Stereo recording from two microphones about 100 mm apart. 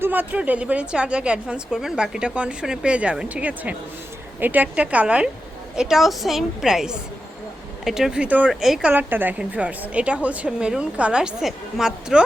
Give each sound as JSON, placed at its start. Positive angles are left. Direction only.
{"t": 0.0, "sound": "a woman's voice", "side_deg": -15}
{"t": 8.9, "sound": "a woman's voice", "side_deg": -20}